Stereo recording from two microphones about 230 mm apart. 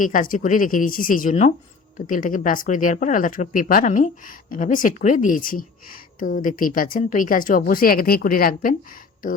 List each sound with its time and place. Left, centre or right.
0.0 s speech: left